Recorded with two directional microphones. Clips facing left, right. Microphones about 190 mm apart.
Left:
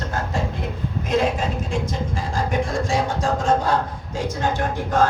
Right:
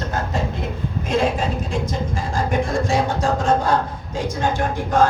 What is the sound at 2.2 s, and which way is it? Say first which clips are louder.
Music: right 2 dB; 50° right (ahead or behind).